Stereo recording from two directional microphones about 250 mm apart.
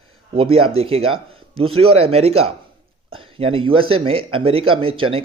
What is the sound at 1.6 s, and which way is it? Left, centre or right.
Speech, right.